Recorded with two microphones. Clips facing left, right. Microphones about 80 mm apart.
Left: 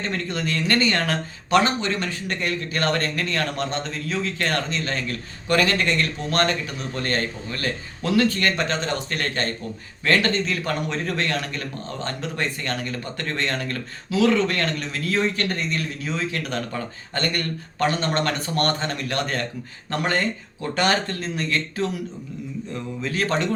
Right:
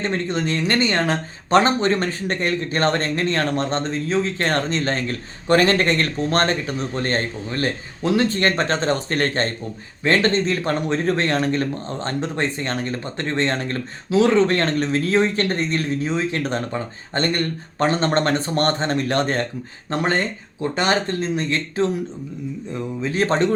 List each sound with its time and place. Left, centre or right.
0.0 s speech: right